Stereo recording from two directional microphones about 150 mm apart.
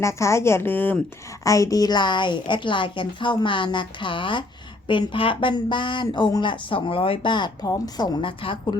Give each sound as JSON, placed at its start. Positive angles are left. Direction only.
{"t": 0.0, "sound": "a woman's voice", "side_deg": 20}